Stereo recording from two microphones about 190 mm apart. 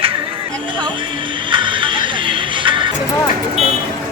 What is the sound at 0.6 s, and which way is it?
Music, 25° right (ahead or behind).